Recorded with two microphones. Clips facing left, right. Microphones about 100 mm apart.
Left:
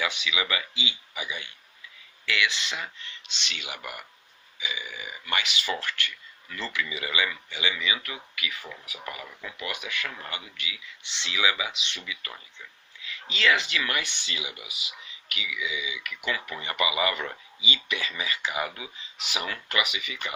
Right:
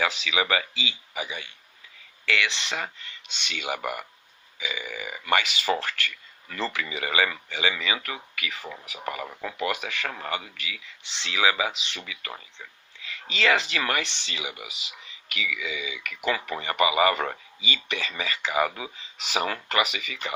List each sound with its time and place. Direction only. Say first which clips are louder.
0.0 s speech: right 4 dB; 40° right (ahead or behind)
2.7 s speech: right 4 dB; 50° right (ahead or behind)
13.4 s speech: right 2 dB; 40° right (ahead or behind)
15.4 s speech: left 1 dB; 50° right (ahead or behind)